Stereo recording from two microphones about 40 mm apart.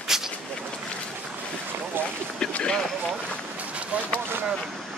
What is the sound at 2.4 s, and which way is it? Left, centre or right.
Speech, left.